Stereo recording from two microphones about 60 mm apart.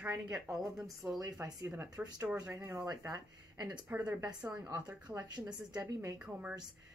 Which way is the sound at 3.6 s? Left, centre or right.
Centre.